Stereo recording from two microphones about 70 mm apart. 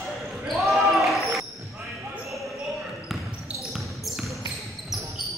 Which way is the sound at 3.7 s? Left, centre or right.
Centre.